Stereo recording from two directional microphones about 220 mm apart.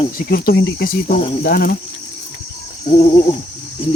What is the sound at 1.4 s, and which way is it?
Speech, 45° left (ahead or behind).